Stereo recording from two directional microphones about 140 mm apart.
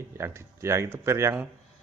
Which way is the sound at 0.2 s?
20° right (ahead or behind).